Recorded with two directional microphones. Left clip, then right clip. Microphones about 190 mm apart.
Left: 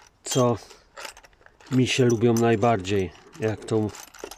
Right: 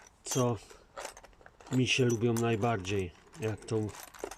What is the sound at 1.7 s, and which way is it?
Speech, 25° left (ahead or behind).